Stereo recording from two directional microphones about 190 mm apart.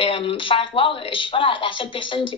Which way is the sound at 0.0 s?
30° left (ahead or behind).